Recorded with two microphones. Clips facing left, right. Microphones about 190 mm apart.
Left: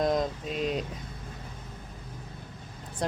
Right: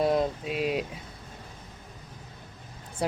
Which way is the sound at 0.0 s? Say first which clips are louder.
Right 2 dB; 5° right (ahead or behind).